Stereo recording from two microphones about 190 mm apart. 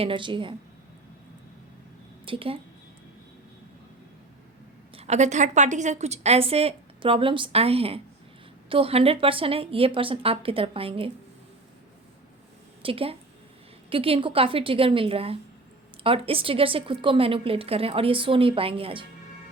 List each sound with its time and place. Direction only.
0.0 s a woman's voice: 25° right (ahead or behind)
2.2 s a woman's voice: 30° right (ahead or behind)
4.9 s a woman's voice: 35° right (ahead or behind)
12.8 s a woman's voice: 30° right (ahead or behind)